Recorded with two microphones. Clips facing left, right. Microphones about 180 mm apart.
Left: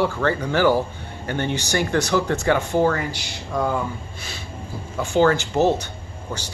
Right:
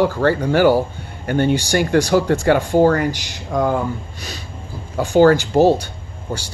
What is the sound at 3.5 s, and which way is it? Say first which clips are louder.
Speech: right 5 dB; 45° right (ahead or behind).